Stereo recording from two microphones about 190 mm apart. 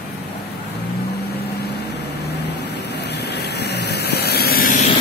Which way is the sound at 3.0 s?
60° left (ahead or behind).